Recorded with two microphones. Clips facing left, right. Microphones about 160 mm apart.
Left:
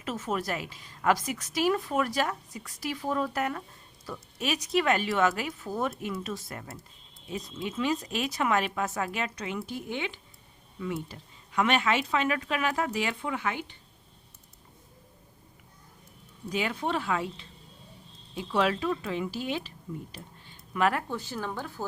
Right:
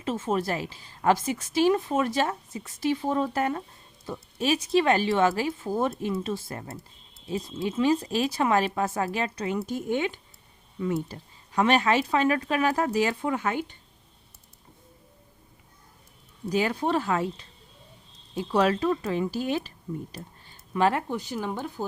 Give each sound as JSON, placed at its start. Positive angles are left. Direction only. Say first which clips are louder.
{"t": 0.0, "sound": "a woman's voice", "louder": "right 5 dB", "side_deg": -30}
{"t": 16.5, "sound": "speech", "louder": "right 5 dB", "side_deg": -40}
{"t": 20.1, "sound": "a sound", "louder": "right 4 dB", "side_deg": -40}
{"t": 21.1, "sound": "speech", "louder": "right 4 dB", "side_deg": -15}